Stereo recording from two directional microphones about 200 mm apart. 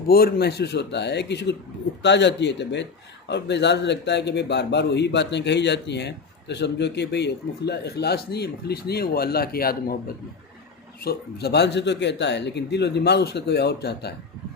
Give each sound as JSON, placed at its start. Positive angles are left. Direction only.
{"t": 0.1, "sound": "a man's voice", "side_deg": 50}
{"t": 11.0, "sound": "a man's voice", "side_deg": 50}